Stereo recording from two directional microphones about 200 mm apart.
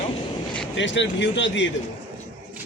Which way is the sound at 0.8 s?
65° left (ahead or behind).